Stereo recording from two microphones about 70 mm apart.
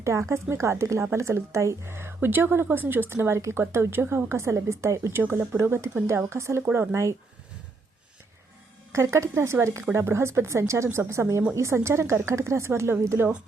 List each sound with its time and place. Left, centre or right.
0.0 s speech: right
5.2 s a woman's voice: right
8.9 s a woman's voice: right